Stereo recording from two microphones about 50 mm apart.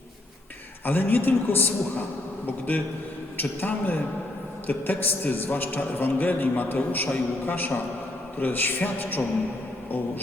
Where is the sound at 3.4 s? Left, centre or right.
Left.